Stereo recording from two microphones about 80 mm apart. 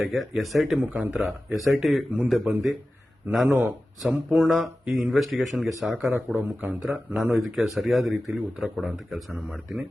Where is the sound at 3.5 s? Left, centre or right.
Right.